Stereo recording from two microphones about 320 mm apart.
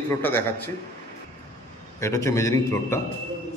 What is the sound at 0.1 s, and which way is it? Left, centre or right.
Speech, centre.